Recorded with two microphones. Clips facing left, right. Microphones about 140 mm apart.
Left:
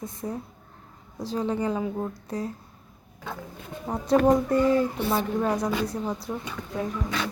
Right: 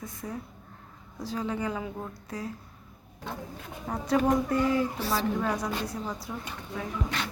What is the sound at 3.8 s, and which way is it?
Speech, 20° left (ahead or behind).